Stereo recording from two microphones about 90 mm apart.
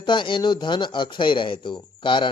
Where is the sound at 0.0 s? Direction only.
65° left (ahead or behind).